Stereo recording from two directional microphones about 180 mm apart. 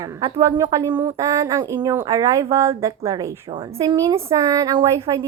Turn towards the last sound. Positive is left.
turn(degrees=-20)  # may be behind; listen again after turning